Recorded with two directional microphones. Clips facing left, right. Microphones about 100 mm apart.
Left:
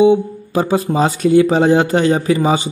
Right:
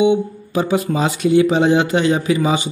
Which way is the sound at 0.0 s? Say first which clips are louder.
Left 4 dB; 35° left (ahead or behind).